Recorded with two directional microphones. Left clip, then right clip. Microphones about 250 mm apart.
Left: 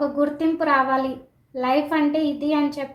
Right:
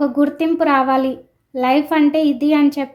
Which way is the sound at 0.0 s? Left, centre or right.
Right.